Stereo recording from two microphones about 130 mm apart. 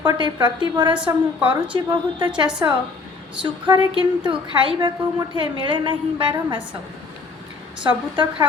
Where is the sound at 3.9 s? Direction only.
40° right (ahead or behind).